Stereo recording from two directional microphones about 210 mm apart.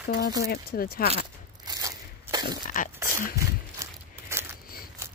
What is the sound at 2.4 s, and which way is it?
Speech, 40° left (ahead or behind).